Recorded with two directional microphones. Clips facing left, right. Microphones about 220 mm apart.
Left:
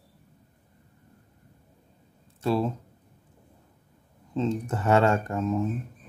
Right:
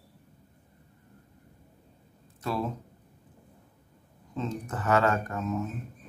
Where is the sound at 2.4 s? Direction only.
25° left (ahead or behind).